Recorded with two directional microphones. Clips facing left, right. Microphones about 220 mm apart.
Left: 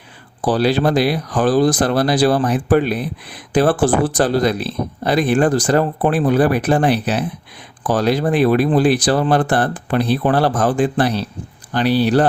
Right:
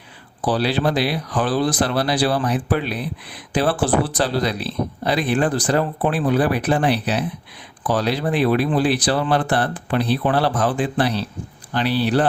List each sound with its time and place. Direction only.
0.4 s speech: 45° left (ahead or behind)